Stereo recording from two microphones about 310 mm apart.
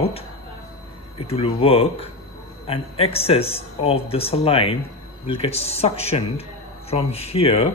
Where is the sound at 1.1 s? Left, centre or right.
Centre.